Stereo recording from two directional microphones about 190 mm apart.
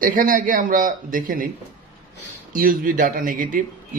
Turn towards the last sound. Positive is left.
turn(degrees=-45)  # may be behind; listen again after turning